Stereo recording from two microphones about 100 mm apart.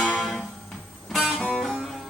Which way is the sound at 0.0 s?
10° left (ahead or behind).